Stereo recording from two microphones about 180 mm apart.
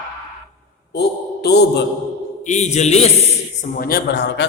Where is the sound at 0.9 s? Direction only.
65° left (ahead or behind).